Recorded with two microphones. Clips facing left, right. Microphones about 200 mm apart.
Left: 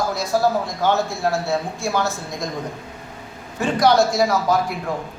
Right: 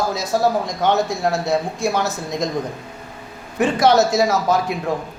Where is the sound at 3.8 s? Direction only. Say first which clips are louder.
Even; 20° right (ahead or behind).